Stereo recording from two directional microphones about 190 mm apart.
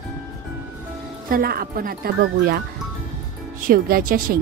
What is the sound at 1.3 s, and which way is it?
Speech, 50° right (ahead or behind).